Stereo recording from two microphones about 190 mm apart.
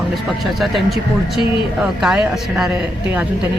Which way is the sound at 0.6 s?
Centre (ahead or behind).